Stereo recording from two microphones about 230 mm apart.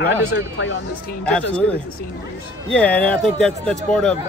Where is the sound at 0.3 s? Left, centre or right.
Left.